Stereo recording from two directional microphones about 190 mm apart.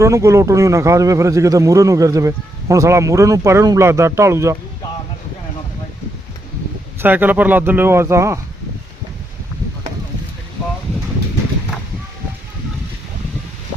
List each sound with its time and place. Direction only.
0.0 s a man's voice: 15° right (ahead or behind)
7.0 s a man's voice: 10° right (ahead or behind)